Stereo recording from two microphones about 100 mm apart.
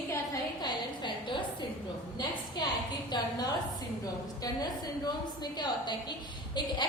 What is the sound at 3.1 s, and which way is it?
A woman's voice, 45° left (ahead or behind).